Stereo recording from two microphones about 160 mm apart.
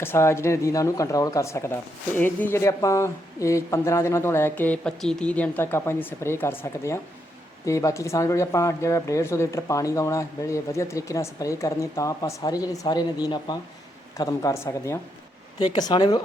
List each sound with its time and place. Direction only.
0.0 s a woman's voice: 15° left (ahead or behind)